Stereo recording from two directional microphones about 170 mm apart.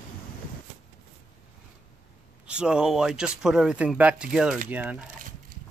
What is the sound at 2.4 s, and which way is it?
Speech, 5° right (ahead or behind).